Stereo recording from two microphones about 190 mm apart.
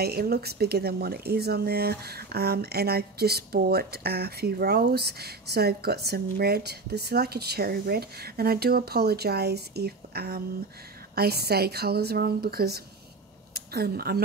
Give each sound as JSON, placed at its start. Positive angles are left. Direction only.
{"t": 0.0, "sound": "speech", "side_deg": -55}